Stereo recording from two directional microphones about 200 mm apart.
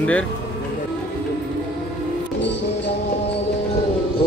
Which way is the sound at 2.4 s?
60° left (ahead or behind).